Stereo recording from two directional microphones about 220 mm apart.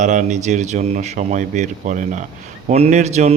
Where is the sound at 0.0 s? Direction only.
35° right (ahead or behind).